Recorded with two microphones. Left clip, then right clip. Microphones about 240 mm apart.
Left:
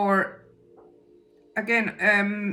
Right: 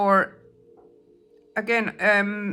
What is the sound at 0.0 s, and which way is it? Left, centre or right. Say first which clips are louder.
Speech: right 3 dB; centre.